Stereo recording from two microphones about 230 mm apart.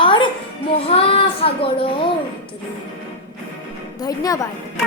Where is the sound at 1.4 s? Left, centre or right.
Left.